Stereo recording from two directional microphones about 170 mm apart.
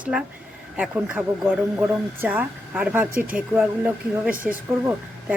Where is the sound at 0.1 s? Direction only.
5° right (ahead or behind).